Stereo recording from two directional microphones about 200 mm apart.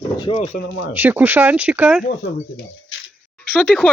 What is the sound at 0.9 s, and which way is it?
Speech, 10° right (ahead or behind).